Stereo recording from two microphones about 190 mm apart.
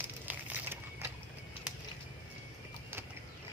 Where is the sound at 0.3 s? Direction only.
10° right (ahead or behind).